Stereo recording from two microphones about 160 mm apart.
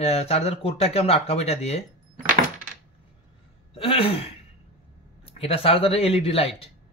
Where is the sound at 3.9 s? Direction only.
35° left (ahead or behind).